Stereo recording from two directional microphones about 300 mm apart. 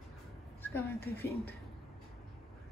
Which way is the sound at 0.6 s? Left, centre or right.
Centre.